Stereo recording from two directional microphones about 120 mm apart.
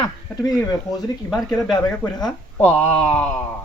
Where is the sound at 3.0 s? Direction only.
15° left (ahead or behind).